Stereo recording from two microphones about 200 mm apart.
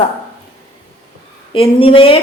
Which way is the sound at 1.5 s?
25° left (ahead or behind).